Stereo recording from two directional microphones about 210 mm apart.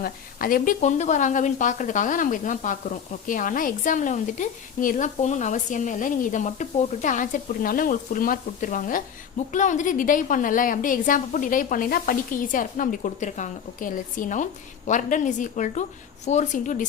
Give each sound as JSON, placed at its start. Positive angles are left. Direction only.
{"t": 0.0, "sound": "a woman's voice", "side_deg": 45}